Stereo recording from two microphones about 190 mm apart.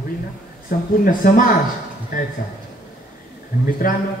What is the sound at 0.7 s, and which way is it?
Speech, 45° left (ahead or behind).